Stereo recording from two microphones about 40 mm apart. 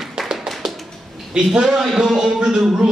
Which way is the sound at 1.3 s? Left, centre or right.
Centre.